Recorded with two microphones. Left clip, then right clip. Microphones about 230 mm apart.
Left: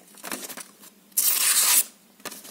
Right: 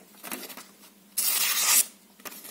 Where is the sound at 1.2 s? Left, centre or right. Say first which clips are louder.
Left 3 dB; left.